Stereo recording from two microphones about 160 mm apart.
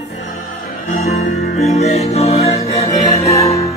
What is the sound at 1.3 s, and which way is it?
Music, 40° left (ahead or behind).